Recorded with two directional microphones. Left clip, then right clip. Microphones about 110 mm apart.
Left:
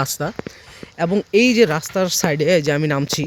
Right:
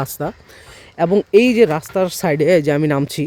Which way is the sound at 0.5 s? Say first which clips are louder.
Right 3 dB; 45° right (ahead or behind).